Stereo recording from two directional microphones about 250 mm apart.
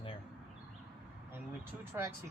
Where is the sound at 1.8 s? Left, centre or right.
Centre.